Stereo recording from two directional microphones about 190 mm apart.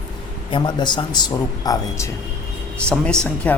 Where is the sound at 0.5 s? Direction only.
25° left (ahead or behind).